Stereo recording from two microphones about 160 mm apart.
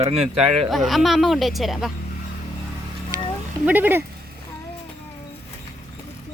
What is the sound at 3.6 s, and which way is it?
Speech, 10° right (ahead or behind).